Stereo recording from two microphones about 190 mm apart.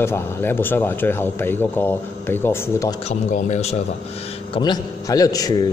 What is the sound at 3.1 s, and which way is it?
Speech, 35° left (ahead or behind).